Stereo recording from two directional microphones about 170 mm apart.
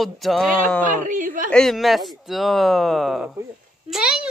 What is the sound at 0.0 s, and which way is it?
Speech, centre (ahead or behind).